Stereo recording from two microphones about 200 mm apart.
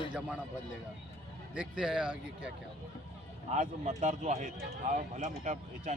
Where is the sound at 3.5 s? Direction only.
35° right (ahead or behind).